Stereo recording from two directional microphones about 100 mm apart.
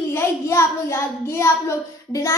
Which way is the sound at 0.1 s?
25° left (ahead or behind).